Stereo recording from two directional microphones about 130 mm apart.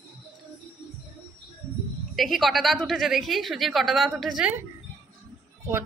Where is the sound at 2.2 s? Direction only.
Centre (ahead or behind).